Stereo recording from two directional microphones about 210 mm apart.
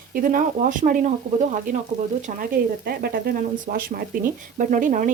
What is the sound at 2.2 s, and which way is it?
Speech, 40° right (ahead or behind).